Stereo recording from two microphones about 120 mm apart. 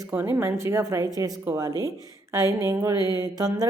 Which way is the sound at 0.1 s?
20° right (ahead or behind).